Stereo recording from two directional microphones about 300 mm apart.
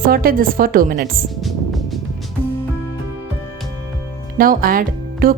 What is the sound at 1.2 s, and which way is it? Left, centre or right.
Music, centre.